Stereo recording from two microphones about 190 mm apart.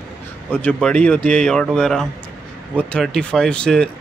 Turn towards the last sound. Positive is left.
turn(degrees=5)  # may be behind; listen again after turning